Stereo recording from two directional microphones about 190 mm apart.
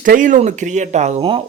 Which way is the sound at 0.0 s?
45° right (ahead or behind).